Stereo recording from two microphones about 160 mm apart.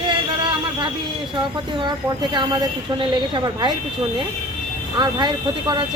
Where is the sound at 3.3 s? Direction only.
30° right (ahead or behind).